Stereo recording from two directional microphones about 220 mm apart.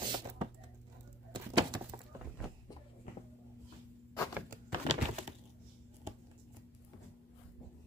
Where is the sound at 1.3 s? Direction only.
20° right (ahead or behind).